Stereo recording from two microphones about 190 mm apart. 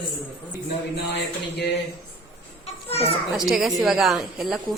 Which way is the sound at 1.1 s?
60° left (ahead or behind).